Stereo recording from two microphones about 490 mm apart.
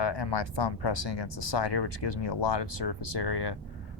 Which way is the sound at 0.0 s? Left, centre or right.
Left.